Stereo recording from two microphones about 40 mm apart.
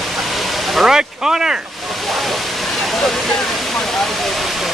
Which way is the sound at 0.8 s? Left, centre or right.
Centre.